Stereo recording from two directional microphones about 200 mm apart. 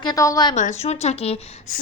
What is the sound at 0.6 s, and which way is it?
A woman's voice, 35° left (ahead or behind).